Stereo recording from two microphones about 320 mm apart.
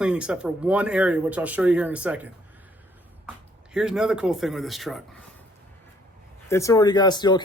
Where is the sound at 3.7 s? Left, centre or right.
Centre.